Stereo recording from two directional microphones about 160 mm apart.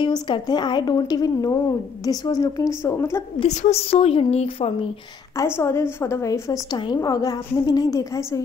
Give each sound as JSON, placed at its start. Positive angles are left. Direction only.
{"t": 0.0, "sound": "a woman's voice", "side_deg": 30}
{"t": 3.3, "sound": "a woman's voice", "side_deg": 40}
{"t": 5.3, "sound": "a woman's voice", "side_deg": 20}